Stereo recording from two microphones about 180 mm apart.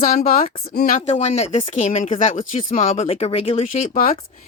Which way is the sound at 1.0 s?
35° left (ahead or behind).